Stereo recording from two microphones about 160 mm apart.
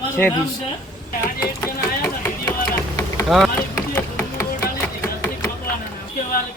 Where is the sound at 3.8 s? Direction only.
15° left (ahead or behind).